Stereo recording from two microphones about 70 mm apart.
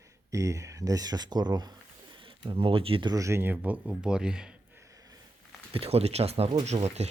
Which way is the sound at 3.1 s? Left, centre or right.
Right.